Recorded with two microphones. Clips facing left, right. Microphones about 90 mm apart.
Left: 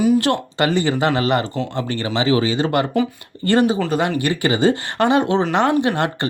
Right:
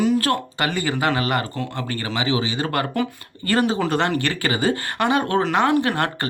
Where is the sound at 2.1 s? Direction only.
40° left (ahead or behind).